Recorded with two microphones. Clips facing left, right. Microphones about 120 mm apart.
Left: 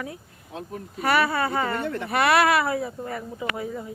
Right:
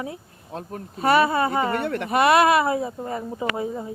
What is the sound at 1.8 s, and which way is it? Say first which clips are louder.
Speech: right 3 dB; 65° right (ahead or behind).